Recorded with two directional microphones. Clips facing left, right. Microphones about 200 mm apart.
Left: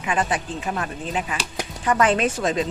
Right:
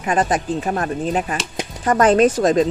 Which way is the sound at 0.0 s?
40° right (ahead or behind).